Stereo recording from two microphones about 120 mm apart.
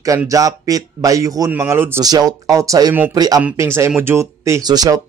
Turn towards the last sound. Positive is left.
turn(degrees=-35)  # may be behind; listen again after turning